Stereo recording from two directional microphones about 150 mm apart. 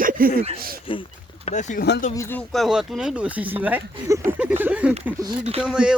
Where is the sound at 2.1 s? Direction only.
15° left (ahead or behind).